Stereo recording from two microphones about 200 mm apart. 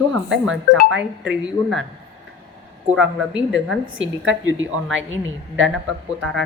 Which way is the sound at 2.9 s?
Centre (ahead or behind).